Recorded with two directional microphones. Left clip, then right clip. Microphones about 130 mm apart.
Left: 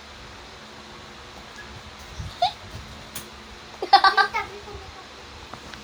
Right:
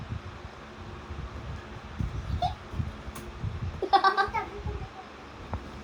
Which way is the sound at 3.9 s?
10° left (ahead or behind).